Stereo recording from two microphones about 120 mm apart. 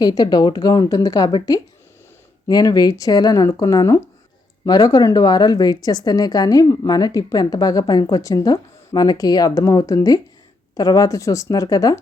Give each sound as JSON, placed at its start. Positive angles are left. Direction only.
{"t": 0.0, "sound": "a woman's voice", "side_deg": 35}
{"t": 2.5, "sound": "a woman's voice", "side_deg": 35}